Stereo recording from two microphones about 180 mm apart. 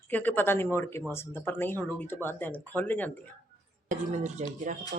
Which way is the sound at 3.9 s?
40° right (ahead or behind).